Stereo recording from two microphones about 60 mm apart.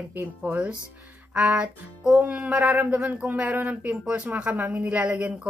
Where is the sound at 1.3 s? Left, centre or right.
Right.